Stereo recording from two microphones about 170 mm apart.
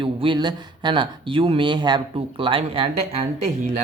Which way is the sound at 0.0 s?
30° right (ahead or behind).